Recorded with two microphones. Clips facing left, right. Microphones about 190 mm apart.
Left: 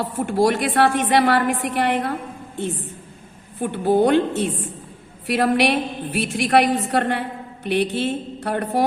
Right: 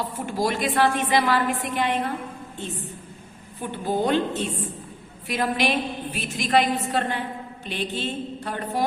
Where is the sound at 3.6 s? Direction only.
65° left (ahead or behind).